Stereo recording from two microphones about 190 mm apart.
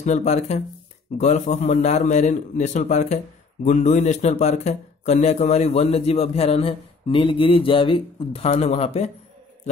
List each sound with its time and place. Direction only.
0.0 s speech: 35° left (ahead or behind)